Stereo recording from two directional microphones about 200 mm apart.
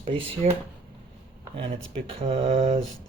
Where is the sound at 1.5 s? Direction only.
25° right (ahead or behind).